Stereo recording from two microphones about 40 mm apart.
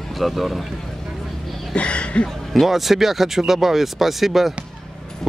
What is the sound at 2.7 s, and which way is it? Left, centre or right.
Speech, centre.